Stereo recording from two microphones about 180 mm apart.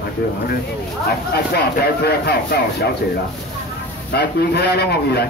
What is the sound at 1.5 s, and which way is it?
Speech, 65° left (ahead or behind).